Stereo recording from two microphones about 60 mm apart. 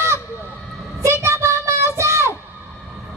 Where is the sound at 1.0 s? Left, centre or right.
Right.